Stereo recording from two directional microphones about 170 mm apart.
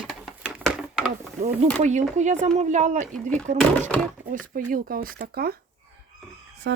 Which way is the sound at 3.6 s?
5° left (ahead or behind).